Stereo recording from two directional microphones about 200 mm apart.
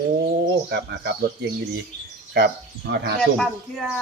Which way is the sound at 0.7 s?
55° right (ahead or behind).